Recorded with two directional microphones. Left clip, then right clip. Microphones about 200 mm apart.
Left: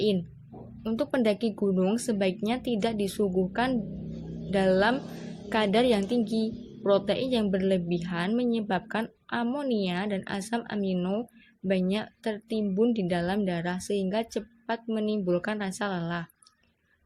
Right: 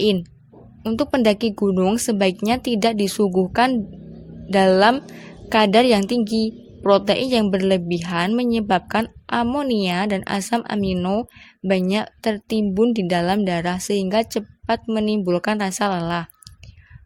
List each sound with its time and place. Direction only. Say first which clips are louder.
0.9 s a woman's voice: right 8 dB; 45° right (ahead or behind)